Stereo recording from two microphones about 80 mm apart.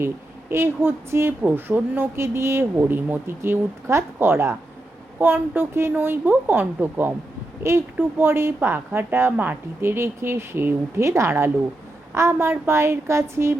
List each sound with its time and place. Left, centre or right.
0.5 s a woman's voice: right